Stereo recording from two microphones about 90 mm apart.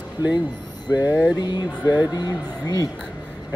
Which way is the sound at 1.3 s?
50° left (ahead or behind).